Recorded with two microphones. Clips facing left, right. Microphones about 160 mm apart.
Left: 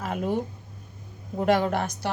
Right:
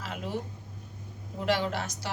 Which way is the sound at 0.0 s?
50° left (ahead or behind).